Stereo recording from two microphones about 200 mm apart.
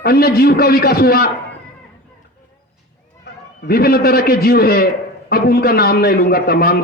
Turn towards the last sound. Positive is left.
turn(degrees=50)  # may be behind; listen again after turning